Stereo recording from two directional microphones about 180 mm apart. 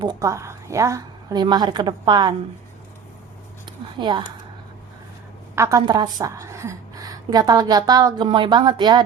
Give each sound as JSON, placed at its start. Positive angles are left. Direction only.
{"t": 0.0, "sound": "a woman's voice", "side_deg": -20}
{"t": 3.7, "sound": "speech", "side_deg": -25}
{"t": 5.5, "sound": "a woman's voice", "side_deg": -20}